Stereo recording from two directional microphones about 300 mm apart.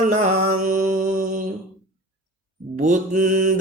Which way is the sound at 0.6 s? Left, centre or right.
Right.